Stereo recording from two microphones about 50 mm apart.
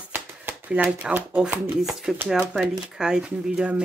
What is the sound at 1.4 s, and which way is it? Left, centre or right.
Speech, centre.